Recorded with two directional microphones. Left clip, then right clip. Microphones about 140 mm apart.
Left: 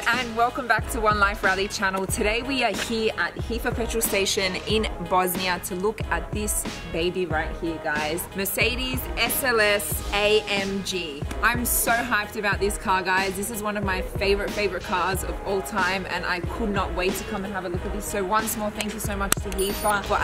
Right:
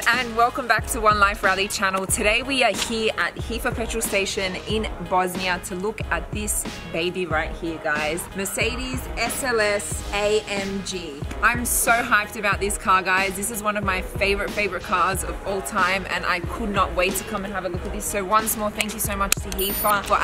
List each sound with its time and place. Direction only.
0.0 s a woman's voice: centre (ahead or behind)
8.4 s a woman's voice: 15° left (ahead or behind)